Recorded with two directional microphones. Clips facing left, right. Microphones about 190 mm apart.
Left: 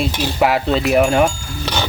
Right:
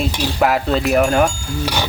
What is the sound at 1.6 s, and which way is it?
Speech, 10° right (ahead or behind).